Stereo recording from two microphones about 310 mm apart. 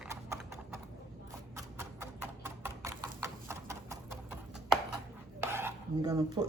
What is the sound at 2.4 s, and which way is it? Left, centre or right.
Clip-clop, centre.